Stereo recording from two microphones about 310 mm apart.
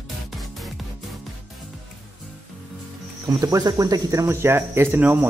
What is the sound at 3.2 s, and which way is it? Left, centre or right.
Speech, centre.